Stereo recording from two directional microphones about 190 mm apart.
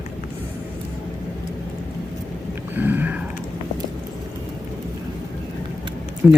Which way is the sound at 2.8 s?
10° right (ahead or behind).